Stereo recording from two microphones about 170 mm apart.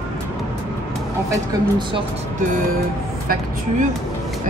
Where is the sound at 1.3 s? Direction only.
25° right (ahead or behind).